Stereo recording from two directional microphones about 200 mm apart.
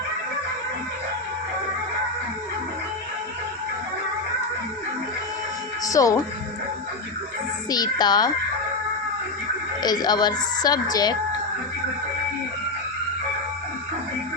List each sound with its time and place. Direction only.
5.8 s speech: 15° left (ahead or behind)
7.7 s speech: 20° left (ahead or behind)
9.8 s speech: 20° left (ahead or behind)